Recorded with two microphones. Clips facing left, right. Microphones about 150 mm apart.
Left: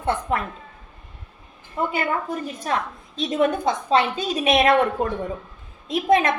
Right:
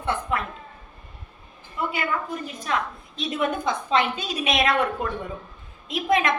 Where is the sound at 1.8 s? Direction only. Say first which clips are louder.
Left 3 dB; 40° left (ahead or behind).